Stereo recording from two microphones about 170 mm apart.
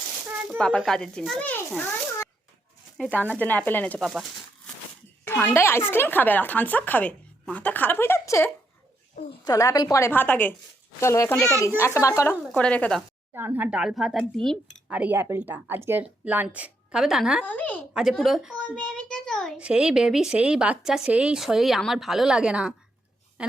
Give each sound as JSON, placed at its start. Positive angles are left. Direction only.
{"t": 0.8, "sound": "a child's voice", "side_deg": 5}
{"t": 3.0, "sound": "a woman's voice", "side_deg": 10}
{"t": 4.0, "sound": "crumpling", "side_deg": 0}
{"t": 5.2, "sound": "a sound", "side_deg": 10}
{"t": 5.5, "sound": "a woman's voice", "side_deg": 15}
{"t": 12.5, "sound": "a woman's voice", "side_deg": 5}
{"t": 13.3, "sound": "speech", "side_deg": -10}
{"t": 17.4, "sound": "a woman's voice", "side_deg": 10}